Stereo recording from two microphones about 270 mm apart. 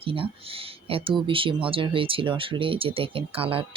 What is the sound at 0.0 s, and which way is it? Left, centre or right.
Speech, centre.